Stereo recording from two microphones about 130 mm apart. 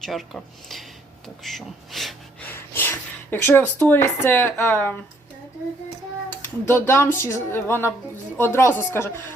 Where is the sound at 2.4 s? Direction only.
15° left (ahead or behind).